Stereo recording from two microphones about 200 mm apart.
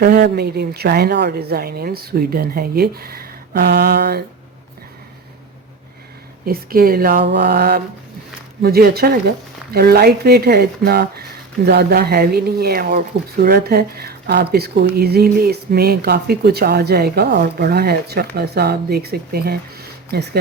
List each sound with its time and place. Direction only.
0.0 s speech: 50° right (ahead or behind)
6.4 s speech: 50° right (ahead or behind)